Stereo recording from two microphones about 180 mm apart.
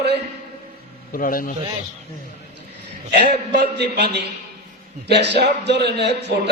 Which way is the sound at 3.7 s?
65° right (ahead or behind).